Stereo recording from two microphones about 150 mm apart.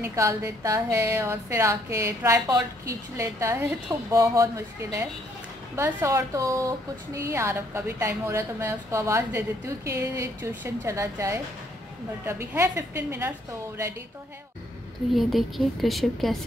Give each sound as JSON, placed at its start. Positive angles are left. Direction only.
{"t": 0.0, "sound": "a woman's voice", "side_deg": -20}
{"t": 15.1, "sound": "a woman's voice", "side_deg": 0}